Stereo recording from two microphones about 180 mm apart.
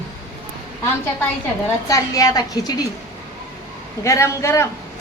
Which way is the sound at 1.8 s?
20° left (ahead or behind).